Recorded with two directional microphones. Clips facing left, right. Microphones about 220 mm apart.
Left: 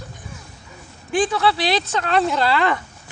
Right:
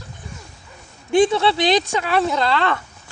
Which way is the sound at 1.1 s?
25° right (ahead or behind).